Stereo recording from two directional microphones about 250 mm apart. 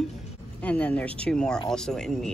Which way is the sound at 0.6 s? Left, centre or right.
Centre.